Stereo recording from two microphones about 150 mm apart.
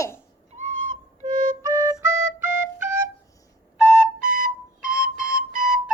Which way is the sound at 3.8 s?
5° right (ahead or behind).